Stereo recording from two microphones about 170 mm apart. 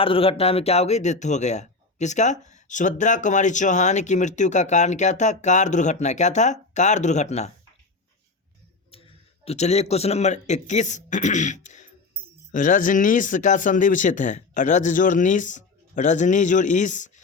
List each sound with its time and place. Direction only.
0.0 s speech: 35° left (ahead or behind)
8.9 s speech: 35° left (ahead or behind)